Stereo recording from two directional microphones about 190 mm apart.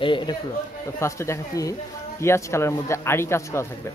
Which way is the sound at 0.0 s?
25° left (ahead or behind).